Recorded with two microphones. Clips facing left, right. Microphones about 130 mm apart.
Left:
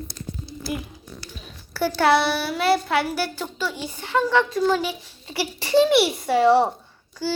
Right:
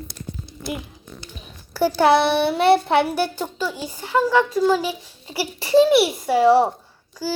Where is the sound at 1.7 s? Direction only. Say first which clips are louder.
Right 3 dB; 15° right (ahead or behind).